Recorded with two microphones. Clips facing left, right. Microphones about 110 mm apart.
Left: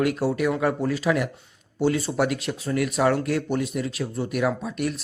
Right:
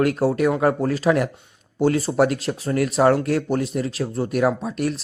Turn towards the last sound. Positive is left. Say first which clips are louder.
# right 4 dB
turn(degrees=-40)  # may be behind; listen again after turning